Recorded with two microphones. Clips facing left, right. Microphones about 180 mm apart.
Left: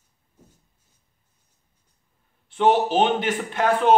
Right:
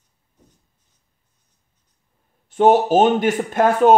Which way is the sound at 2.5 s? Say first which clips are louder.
Right 5 dB; 45° right (ahead or behind).